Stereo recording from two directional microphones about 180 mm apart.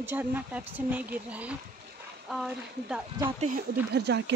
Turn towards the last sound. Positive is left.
turn(degrees=-70)  # may be behind; listen again after turning